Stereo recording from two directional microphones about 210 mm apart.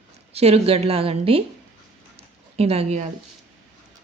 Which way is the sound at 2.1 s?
30° right (ahead or behind).